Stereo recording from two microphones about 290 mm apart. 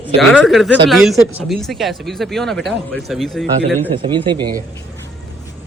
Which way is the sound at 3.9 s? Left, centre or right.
Centre.